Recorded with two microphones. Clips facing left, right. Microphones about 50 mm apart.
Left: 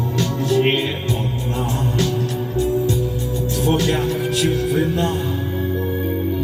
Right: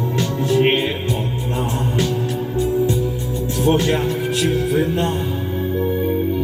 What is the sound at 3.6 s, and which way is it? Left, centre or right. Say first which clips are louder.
Speech: right 2 dB; centre.